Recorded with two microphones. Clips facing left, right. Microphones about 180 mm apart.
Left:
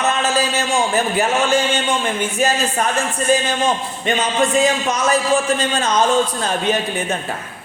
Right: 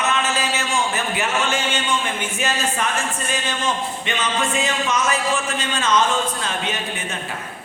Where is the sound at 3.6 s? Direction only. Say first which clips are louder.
Left 5 dB; 40° left (ahead or behind).